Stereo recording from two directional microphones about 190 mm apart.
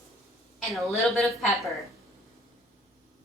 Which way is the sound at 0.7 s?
Centre (ahead or behind).